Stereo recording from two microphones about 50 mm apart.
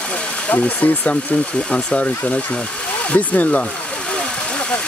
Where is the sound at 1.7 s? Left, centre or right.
Left.